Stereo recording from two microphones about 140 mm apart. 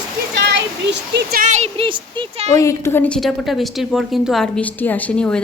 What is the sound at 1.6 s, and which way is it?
Speech, 40° right (ahead or behind).